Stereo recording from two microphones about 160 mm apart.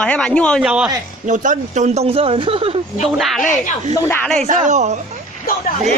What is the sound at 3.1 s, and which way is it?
Speech, centre (ahead or behind).